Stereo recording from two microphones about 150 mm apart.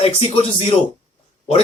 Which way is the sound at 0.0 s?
40° left (ahead or behind).